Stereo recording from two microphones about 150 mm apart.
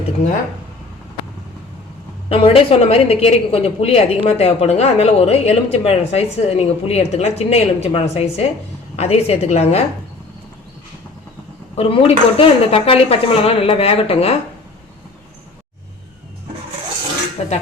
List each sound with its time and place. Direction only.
2.3 s a woman's voice: 40° left (ahead or behind)
11.8 s speech: 40° left (ahead or behind)
17.4 s dishes: 45° left (ahead or behind)